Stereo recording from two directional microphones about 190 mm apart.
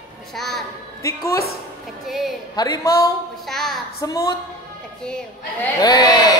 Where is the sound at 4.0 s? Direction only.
20° left (ahead or behind).